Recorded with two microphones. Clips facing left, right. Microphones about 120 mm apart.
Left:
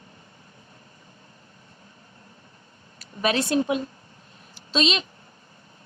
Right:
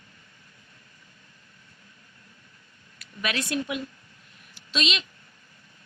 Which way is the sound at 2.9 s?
30° left (ahead or behind).